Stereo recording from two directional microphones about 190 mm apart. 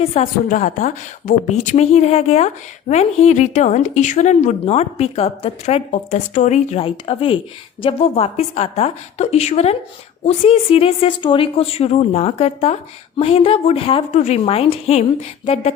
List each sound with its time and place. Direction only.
0.0 s speech: 35° left (ahead or behind)